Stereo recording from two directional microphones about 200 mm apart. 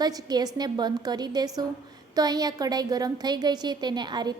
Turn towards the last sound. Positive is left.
turn(degrees=-20)  # may be behind; listen again after turning